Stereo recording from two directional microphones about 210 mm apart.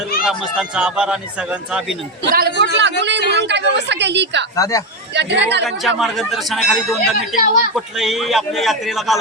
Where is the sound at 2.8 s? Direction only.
55° right (ahead or behind).